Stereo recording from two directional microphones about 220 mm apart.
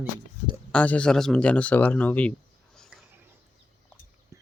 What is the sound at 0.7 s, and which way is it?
Speech, 5° left (ahead or behind).